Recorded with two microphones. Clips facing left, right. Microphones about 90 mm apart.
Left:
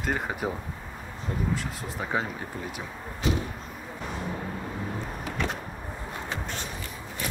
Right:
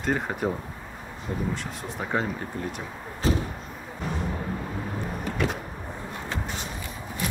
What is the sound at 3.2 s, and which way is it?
Slam, 35° right (ahead or behind).